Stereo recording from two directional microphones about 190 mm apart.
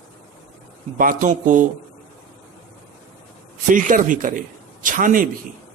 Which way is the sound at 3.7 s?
45° right (ahead or behind).